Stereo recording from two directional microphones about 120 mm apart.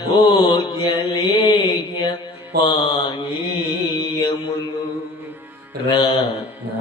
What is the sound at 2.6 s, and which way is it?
Mantra, 40° left (ahead or behind).